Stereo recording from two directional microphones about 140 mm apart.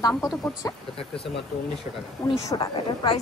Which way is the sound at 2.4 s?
30° left (ahead or behind).